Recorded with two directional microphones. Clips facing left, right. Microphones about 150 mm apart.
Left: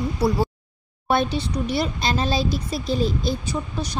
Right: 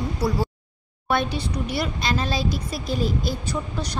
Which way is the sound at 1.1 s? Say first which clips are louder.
Left 2 dB; 30° left (ahead or behind).